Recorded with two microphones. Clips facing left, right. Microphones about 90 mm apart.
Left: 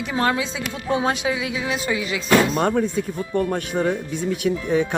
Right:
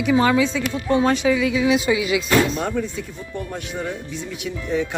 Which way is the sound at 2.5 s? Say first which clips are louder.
Left 4 dB; 55° left (ahead or behind).